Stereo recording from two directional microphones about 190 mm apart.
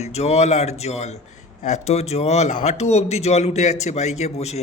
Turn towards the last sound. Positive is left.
turn(degrees=35)  # may be behind; listen again after turning